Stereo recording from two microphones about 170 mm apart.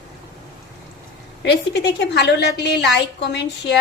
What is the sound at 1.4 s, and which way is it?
A woman's voice, 85° left.